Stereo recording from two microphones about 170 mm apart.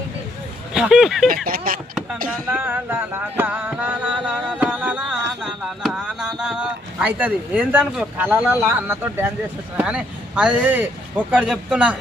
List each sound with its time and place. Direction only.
0.7 s speech: 5° right (ahead or behind)
1.5 s speech: 55° right (ahead or behind)
2.5 s music: 10° right (ahead or behind)
5.4 s speech: 5° right (ahead or behind)
9.7 s music: 5° right (ahead or behind)